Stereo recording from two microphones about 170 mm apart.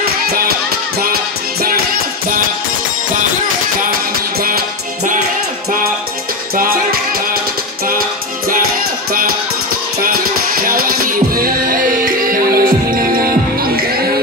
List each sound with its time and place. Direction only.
0.0 s music: 65° right (ahead or behind)
1.6 s music: 60° right (ahead or behind)
4.4 s music: 60° right (ahead or behind)
6.5 s music: 60° right (ahead or behind)
10.6 s music: 55° right (ahead or behind)